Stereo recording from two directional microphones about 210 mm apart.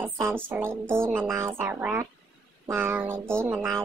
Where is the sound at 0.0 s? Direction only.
10° right (ahead or behind).